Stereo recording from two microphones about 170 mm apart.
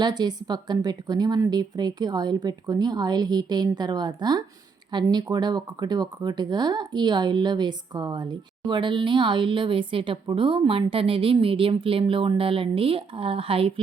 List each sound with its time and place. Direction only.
0.0 s speech: 25° right (ahead or behind)